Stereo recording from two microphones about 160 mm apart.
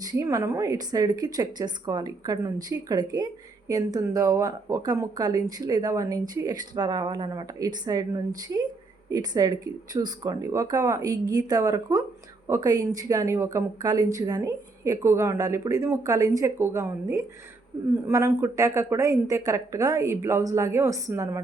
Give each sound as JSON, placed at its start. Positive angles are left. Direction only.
{"t": 0.0, "sound": "a woman's voice", "side_deg": -20}